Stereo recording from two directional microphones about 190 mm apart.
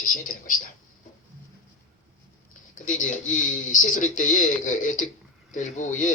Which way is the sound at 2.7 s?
40° left (ahead or behind).